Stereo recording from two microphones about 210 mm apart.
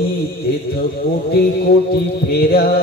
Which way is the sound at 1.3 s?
45° left (ahead or behind).